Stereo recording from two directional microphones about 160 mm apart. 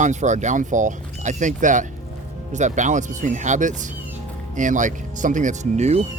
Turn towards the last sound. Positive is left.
turn(degrees=-45)  # may be behind; listen again after turning